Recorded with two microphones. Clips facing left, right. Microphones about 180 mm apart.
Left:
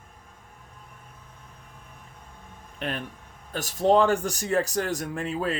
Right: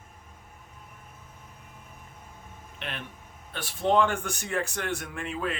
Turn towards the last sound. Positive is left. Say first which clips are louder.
# left 4 dB
turn(degrees=35)  # may be behind; listen again after turning